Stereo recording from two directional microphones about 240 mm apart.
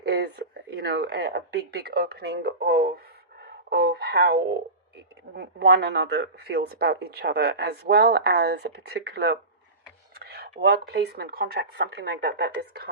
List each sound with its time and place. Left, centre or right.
0.0 s speech: right
3.4 s a sound: right
5.3 s speech: right